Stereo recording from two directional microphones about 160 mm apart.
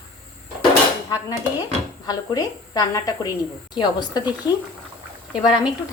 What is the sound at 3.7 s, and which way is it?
Speech, 25° left (ahead or behind).